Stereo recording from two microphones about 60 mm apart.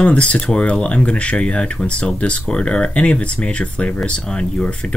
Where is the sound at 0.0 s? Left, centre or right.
Left.